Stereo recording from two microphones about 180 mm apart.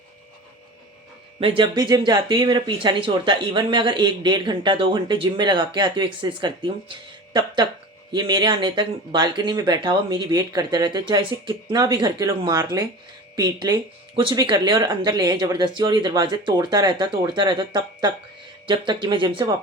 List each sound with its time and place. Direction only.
1.4 s speech: 30° right (ahead or behind)